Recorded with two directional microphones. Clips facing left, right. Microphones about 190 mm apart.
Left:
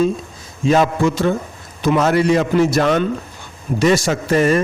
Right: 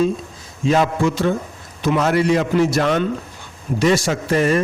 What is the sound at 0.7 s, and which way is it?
A man's voice, 45° left (ahead or behind).